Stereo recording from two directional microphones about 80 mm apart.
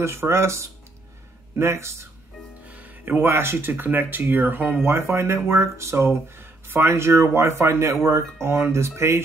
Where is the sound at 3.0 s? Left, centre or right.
Right.